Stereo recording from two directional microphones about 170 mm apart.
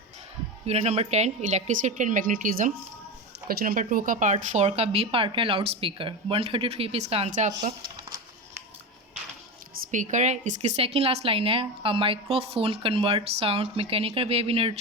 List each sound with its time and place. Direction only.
0.6 s a woman's voice: 40° right (ahead or behind)
9.9 s a woman's voice: 45° right (ahead or behind)